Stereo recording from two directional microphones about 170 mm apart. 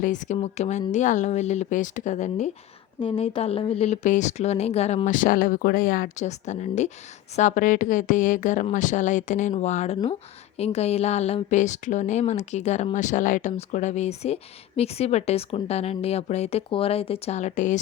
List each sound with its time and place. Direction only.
0.0 s a woman's voice: 45° left (ahead or behind)
3.0 s a woman's voice: 30° left (ahead or behind)